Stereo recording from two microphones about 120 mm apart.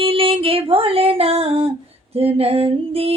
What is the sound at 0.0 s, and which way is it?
Female singing, 50° right (ahead or behind).